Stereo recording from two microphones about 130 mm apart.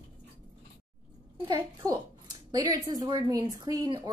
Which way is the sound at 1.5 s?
30° right (ahead or behind).